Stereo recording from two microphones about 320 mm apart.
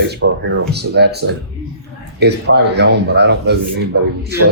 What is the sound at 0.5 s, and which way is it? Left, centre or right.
Speech, right.